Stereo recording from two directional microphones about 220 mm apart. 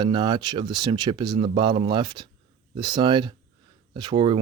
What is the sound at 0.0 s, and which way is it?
Speech, 20° right (ahead or behind).